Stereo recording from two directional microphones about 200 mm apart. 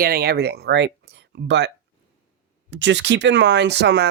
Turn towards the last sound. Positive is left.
turn(degrees=-60)  # may be behind; listen again after turning